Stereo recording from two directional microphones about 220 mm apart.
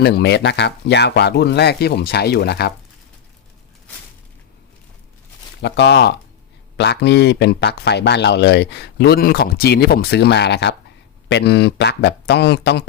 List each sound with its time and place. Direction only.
0.0 s speech: 50° left (ahead or behind)
5.6 s speech: 50° left (ahead or behind)